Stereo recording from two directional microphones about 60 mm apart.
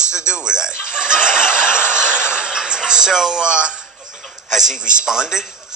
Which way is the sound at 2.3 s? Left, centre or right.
Centre.